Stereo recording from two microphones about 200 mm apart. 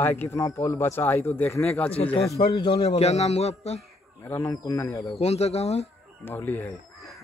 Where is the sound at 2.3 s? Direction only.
30° left (ahead or behind).